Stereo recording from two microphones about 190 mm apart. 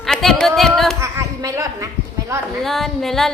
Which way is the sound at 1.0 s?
15° right (ahead or behind).